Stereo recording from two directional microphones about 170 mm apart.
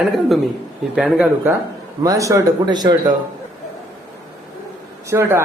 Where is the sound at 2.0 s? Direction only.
20° right (ahead or behind).